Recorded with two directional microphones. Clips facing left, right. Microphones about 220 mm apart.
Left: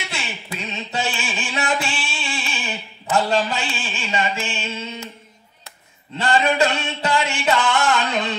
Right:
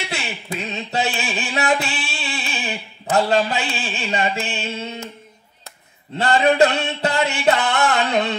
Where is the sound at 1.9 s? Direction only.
60° right (ahead or behind).